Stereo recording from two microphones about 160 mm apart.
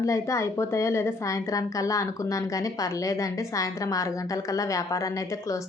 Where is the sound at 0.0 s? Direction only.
20° left (ahead or behind).